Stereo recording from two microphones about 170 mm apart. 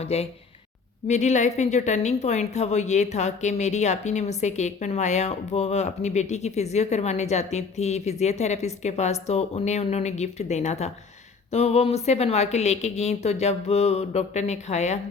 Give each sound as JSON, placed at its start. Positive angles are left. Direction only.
{"t": 0.0, "sound": "a woman's voice", "side_deg": 35}